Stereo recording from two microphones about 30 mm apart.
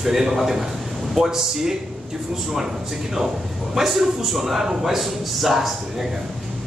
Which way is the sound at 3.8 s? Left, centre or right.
Centre.